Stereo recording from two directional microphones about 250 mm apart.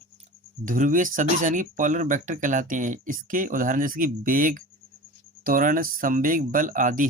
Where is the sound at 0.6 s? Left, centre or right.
Right.